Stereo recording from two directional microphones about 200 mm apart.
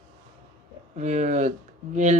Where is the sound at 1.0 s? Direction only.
35° right (ahead or behind).